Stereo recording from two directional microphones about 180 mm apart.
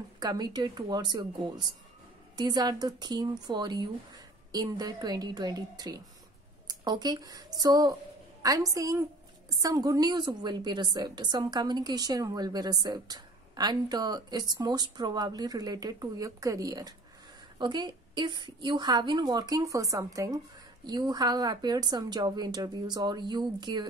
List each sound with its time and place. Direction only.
0.2 s a woman's voice: 20° right (ahead or behind)